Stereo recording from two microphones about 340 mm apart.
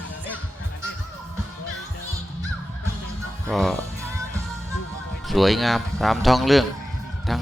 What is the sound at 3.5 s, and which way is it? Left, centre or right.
Speech, centre.